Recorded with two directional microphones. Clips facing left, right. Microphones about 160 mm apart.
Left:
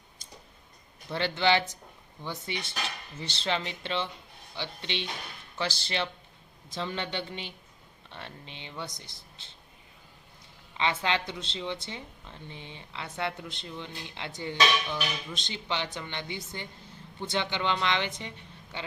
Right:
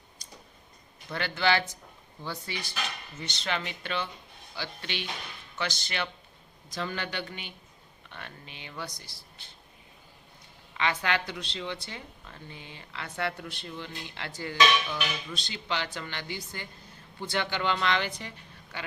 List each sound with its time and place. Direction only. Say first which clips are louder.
1.1 s speech: left 2 dB; 25° left (ahead or behind)
10.8 s speech: even; 25° left (ahead or behind)